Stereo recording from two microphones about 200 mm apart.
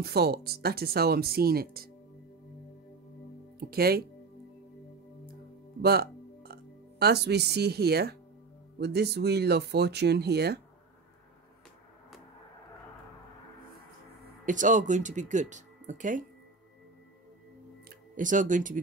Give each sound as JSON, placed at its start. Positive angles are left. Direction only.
{"t": 0.0, "sound": "speech", "side_deg": -50}
{"t": 3.5, "sound": "speech", "side_deg": -50}
{"t": 5.8, "sound": "speech", "side_deg": -50}
{"t": 14.4, "sound": "speech", "side_deg": -40}
{"t": 17.8, "sound": "speech", "side_deg": -40}